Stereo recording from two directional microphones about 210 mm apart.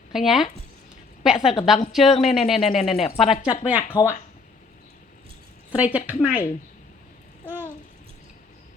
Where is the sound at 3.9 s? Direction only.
20° left (ahead or behind).